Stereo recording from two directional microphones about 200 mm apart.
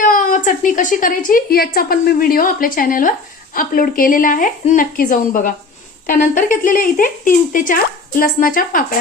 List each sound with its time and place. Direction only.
0.0 s a woman's voice: 40° left (ahead or behind)